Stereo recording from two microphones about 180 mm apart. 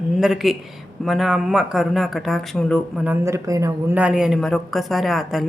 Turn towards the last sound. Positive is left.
turn(degrees=0)  # may be behind; listen again after turning